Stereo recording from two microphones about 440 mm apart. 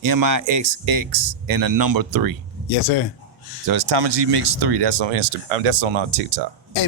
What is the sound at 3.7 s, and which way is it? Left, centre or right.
Speech, right.